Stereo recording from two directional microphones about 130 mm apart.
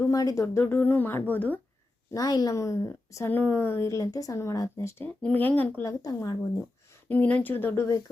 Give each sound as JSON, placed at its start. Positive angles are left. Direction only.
{"t": 0.0, "sound": "speech", "side_deg": 25}
{"t": 2.1, "sound": "a woman's voice", "side_deg": 30}
{"t": 6.0, "sound": "a woman's voice", "side_deg": 25}
{"t": 7.1, "sound": "speech", "side_deg": 10}